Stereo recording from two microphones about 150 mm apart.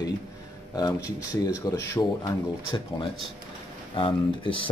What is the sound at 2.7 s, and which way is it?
Speech, 35° left (ahead or behind).